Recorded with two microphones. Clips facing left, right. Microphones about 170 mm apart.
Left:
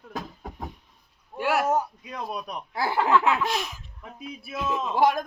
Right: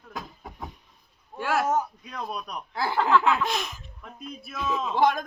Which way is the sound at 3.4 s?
5° left (ahead or behind).